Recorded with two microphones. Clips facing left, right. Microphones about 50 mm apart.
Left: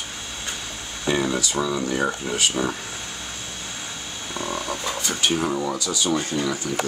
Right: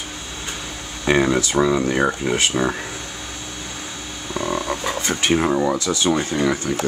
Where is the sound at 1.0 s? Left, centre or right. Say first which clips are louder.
Right 6 dB; right.